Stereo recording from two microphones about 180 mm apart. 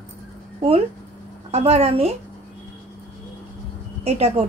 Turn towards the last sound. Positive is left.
turn(degrees=-35)  # may be behind; listen again after turning